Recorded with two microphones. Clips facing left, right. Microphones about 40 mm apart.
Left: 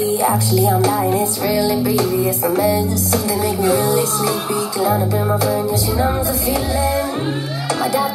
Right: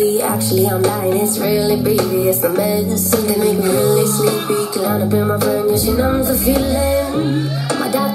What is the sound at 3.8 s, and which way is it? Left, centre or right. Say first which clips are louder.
Music: right 3 dB; left.